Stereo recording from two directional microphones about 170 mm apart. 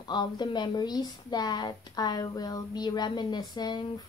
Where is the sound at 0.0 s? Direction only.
25° left (ahead or behind).